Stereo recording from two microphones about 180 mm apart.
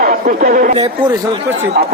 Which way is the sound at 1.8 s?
60° right (ahead or behind).